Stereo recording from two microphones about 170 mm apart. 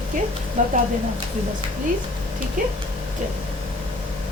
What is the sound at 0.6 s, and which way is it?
Speech, 45° right (ahead or behind).